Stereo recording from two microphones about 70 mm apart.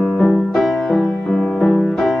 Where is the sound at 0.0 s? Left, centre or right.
Centre.